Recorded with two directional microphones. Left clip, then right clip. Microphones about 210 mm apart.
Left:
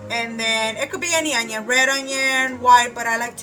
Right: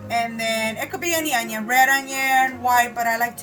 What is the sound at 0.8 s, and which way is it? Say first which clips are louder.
A woman's voice: left 2 dB; 20° left (ahead or behind).